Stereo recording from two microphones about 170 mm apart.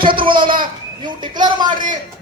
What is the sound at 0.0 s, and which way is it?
Speech, 30° right (ahead or behind).